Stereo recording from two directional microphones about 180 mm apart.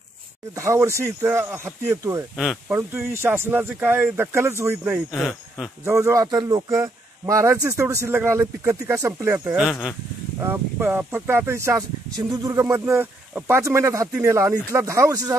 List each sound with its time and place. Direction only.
0.6 s a man's voice: 15° right (ahead or behind)
2.3 s speech: centre (ahead or behind)
2.7 s a man's voice: 15° right (ahead or behind)
5.1 s speech: centre (ahead or behind)
5.9 s a man's voice: 15° right (ahead or behind)
9.7 s speech: centre (ahead or behind)
10.4 s a man's voice: 10° right (ahead or behind)